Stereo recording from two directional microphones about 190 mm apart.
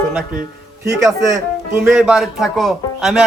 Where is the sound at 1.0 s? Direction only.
15° right (ahead or behind).